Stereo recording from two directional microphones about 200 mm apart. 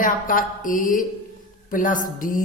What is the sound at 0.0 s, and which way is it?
Music, 40° left (ahead or behind).